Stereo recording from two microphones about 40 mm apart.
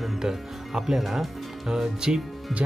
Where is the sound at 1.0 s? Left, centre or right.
Centre.